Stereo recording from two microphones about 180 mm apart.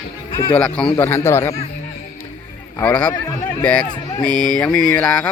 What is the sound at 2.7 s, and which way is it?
A man's voice, 10° left (ahead or behind).